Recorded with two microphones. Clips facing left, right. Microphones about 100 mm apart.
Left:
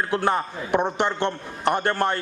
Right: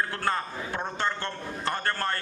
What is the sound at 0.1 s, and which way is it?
A man's voice, 20° left (ahead or behind).